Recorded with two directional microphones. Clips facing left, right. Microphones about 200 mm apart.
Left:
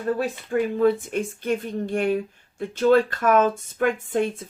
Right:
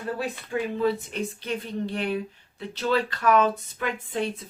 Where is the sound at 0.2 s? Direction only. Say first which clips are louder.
Left 5 dB; 50° left (ahead or behind).